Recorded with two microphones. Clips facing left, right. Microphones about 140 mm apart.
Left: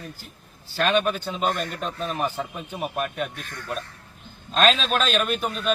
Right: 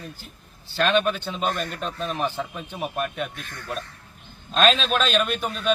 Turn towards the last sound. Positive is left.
turn(degrees=0)  # may be behind; listen again after turning